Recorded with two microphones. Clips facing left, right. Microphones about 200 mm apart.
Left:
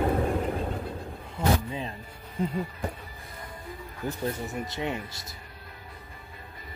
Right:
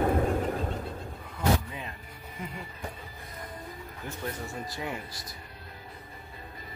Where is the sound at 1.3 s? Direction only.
30° left (ahead or behind).